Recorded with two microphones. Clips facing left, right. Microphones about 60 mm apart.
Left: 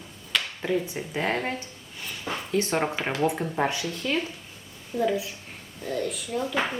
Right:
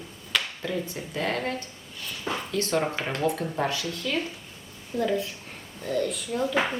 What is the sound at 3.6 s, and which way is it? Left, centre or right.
Speech, left.